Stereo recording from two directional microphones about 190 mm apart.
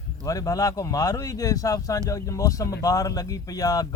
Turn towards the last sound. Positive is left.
turn(degrees=20)  # may be behind; listen again after turning